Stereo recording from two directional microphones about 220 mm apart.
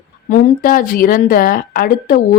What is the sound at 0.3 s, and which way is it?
A woman's voice, 35° left (ahead or behind).